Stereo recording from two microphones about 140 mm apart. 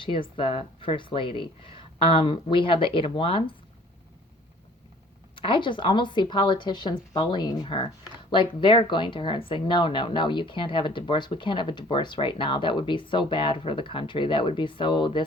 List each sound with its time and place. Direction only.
0.0 s speech: 40° left (ahead or behind)
5.3 s speech: 35° left (ahead or behind)